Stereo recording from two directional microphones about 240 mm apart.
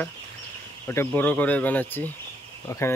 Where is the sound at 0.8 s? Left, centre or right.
Centre.